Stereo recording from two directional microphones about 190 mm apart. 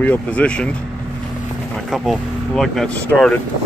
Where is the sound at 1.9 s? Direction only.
Centre (ahead or behind).